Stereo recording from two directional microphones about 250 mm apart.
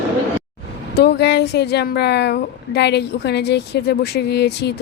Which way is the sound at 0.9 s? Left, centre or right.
Left.